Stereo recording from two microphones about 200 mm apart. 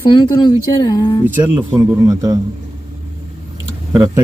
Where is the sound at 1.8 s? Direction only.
15° right (ahead or behind).